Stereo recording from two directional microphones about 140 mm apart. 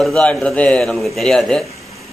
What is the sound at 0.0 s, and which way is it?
A man's voice, 5° left (ahead or behind).